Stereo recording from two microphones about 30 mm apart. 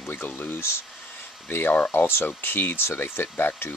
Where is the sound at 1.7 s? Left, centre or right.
Left.